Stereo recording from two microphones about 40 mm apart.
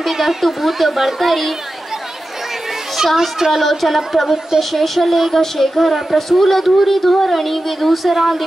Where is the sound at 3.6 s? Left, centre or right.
Centre.